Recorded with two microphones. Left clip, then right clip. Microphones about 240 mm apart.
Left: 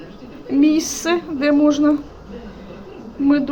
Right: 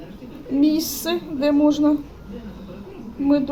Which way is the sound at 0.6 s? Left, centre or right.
Left.